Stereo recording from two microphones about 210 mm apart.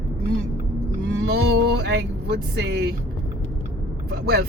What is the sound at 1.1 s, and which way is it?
Speech, 50° right (ahead or behind).